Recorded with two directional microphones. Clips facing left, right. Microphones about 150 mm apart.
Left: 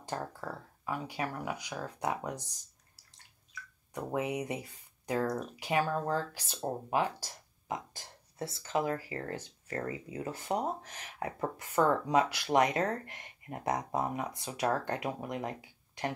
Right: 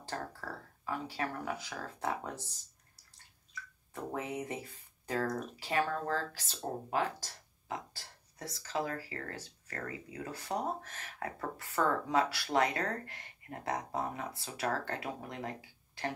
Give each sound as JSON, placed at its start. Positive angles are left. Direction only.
{"t": 0.8, "sound": "speech", "side_deg": 15}
{"t": 3.9, "sound": "speech", "side_deg": 15}
{"t": 8.4, "sound": "speech", "side_deg": 30}